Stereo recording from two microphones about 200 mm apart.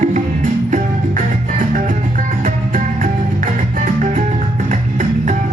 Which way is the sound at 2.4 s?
40° right (ahead or behind).